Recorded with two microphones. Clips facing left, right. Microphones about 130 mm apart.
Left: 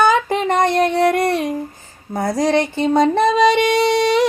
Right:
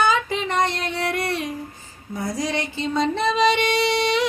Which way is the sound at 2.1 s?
60° left (ahead or behind).